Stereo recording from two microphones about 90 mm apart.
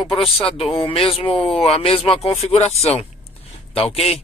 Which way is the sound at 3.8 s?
90° left.